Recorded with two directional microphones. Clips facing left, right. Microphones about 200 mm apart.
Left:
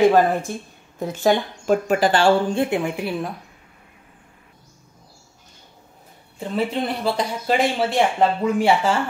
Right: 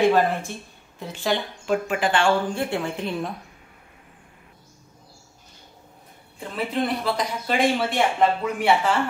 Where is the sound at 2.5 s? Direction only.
20° left (ahead or behind).